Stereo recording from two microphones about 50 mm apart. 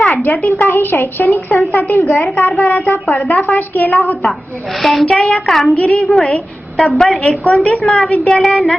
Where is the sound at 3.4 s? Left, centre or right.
Left.